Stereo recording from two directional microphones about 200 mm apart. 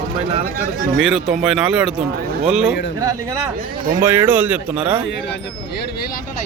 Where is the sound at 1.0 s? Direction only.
5° right (ahead or behind).